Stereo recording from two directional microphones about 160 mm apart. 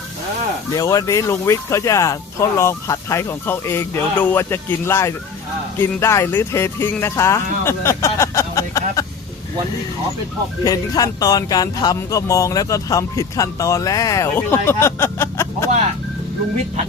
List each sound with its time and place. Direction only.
0.8 s speech: 20° left (ahead or behind)
10.6 s speech: 25° left (ahead or behind)